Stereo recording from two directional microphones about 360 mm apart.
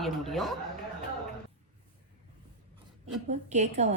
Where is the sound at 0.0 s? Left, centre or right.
Centre.